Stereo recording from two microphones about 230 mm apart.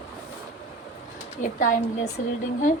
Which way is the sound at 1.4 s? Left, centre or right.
Left.